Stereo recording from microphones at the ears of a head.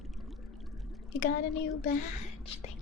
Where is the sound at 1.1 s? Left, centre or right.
Left.